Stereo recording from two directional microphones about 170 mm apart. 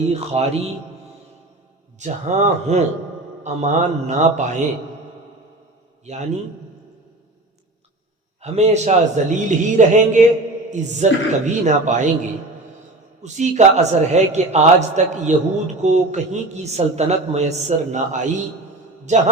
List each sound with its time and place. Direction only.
0.1 s speech: 40° right (ahead or behind)
2.0 s a man's voice: 45° right (ahead or behind)
6.1 s a man's voice: 40° right (ahead or behind)
8.4 s a man's voice: 40° right (ahead or behind)